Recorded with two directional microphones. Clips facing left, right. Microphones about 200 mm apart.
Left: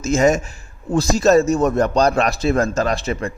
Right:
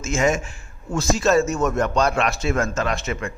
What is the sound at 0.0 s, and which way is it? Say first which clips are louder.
Speech: left 5 dB; 40° left (ahead or behind).